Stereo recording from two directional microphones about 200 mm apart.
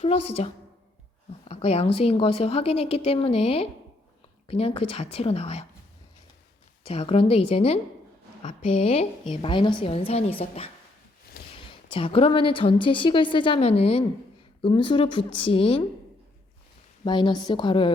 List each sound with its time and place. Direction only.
0.0 s a woman's voice: 30° left (ahead or behind)
6.8 s a woman's voice: 30° left (ahead or behind)
11.7 s a woman's voice: 25° left (ahead or behind)
17.0 s a woman's voice: 25° left (ahead or behind)